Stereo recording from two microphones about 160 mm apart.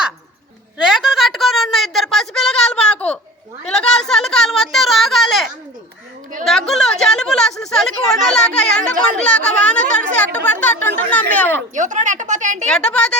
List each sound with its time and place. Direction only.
0.8 s a sound: centre (ahead or behind)
11.7 s speech: 50° right (ahead or behind)
12.6 s a woman's voice: 5° left (ahead or behind)